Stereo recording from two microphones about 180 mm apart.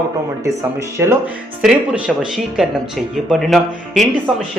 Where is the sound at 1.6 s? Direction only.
Centre (ahead or behind).